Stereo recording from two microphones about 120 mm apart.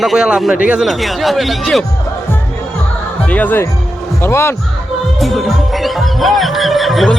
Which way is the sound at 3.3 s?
15° left (ahead or behind).